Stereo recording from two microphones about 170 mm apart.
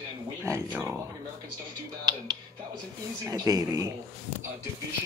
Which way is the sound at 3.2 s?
20° right (ahead or behind).